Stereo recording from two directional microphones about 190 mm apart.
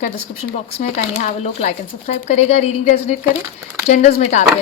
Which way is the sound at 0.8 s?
40° left (ahead or behind).